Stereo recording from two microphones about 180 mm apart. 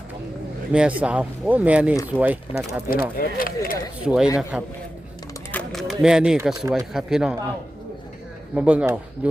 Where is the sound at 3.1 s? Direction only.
50° left (ahead or behind).